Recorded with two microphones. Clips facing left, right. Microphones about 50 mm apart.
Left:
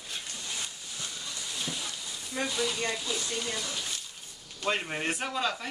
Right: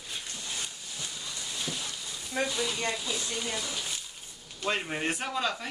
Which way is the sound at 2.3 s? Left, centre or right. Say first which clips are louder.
Right 1 dB; centre.